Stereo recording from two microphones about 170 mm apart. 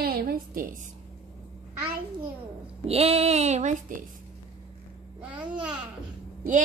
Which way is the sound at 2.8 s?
35° right (ahead or behind).